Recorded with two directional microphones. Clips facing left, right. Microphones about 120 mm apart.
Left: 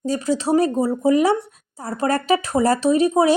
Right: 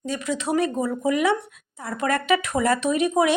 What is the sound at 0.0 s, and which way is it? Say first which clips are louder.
A woman's voice: left 6 dB; 35° left (ahead or behind).